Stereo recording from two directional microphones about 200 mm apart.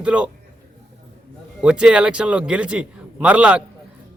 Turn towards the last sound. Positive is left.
turn(degrees=-5)  # may be behind; listen again after turning